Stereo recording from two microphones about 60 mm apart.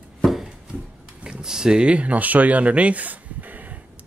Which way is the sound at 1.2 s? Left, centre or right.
Centre.